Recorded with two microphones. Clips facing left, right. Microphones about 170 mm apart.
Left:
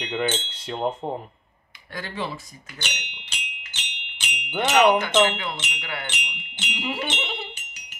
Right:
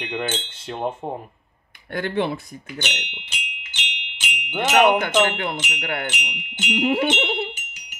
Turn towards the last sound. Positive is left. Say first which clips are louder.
# right 8 dB
turn(degrees=-60)  # may be behind; listen again after turning